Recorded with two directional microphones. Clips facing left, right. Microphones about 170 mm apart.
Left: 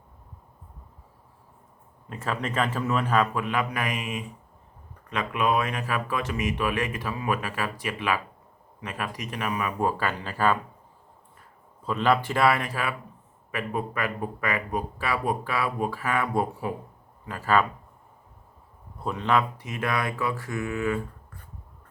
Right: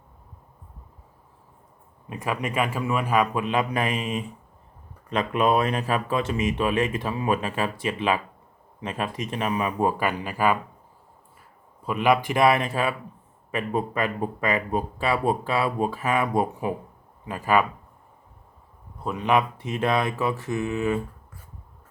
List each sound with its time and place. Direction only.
2.0 s a man's voice: 15° right (ahead or behind)
11.8 s a man's voice: 10° right (ahead or behind)
18.9 s speech: centre (ahead or behind)
19.2 s speech: 20° right (ahead or behind)